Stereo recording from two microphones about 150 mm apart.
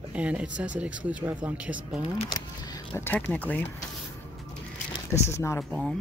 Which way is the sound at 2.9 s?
10° left (ahead or behind).